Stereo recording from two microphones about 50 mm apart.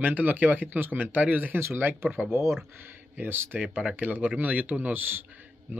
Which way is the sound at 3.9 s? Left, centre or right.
Right.